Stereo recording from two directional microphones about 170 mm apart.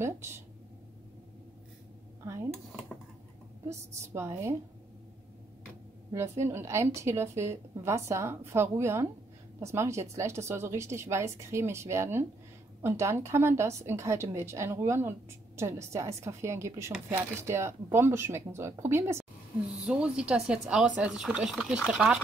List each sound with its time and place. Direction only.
0.0 s a woman's voice: 15° right (ahead or behind)
2.2 s a woman's voice: 15° right (ahead or behind)
6.1 s a woman's voice: 15° right (ahead or behind)